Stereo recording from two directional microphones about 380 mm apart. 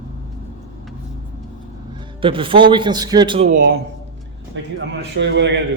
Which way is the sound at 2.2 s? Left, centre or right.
Centre.